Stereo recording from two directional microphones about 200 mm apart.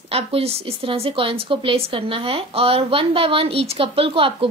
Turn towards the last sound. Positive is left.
turn(degrees=-25)  # may be behind; listen again after turning